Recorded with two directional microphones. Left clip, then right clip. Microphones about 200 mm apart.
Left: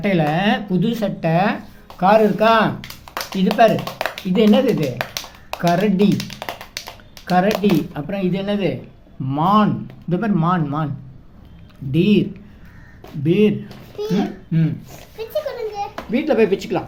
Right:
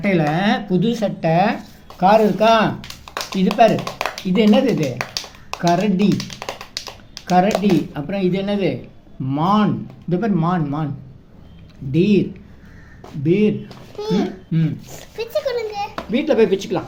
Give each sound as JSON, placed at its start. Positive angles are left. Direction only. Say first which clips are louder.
{"t": 0.0, "sound": "speech", "louder": "even", "side_deg": 0}
{"t": 6.1, "sound": "tap", "louder": "even", "side_deg": 20}
{"t": 7.3, "sound": "speech", "louder": "right 1 dB", "side_deg": 5}
{"t": 11.9, "sound": "speech", "louder": "right 1 dB", "side_deg": 10}
{"t": 13.2, "sound": "speech", "louder": "left 1 dB", "side_deg": 10}
{"t": 14.9, "sound": "a sound", "louder": "right 3 dB", "side_deg": -30}
{"t": 16.1, "sound": "speech", "louder": "right 1 dB", "side_deg": 0}